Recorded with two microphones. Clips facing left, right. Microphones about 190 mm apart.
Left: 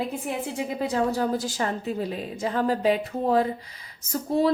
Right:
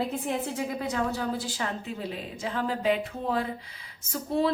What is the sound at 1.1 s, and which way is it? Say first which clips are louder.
A woman's voice: left 5 dB; 45° left (ahead or behind).